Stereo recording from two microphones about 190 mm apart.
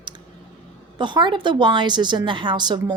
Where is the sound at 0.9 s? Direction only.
25° right (ahead or behind).